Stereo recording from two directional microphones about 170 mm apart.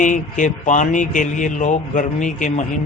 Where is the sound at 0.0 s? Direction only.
50° left (ahead or behind).